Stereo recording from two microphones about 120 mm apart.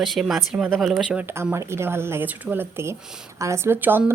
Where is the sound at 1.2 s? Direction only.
20° right (ahead or behind).